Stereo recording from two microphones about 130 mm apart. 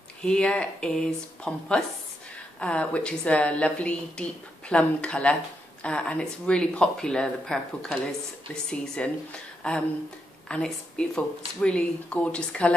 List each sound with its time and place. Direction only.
0.2 s a woman's voice: 5° left (ahead or behind)